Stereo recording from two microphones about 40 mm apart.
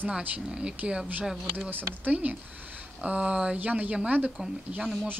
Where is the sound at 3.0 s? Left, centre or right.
Right.